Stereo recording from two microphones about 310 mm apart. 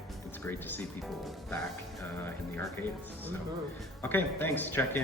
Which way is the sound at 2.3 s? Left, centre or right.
Centre.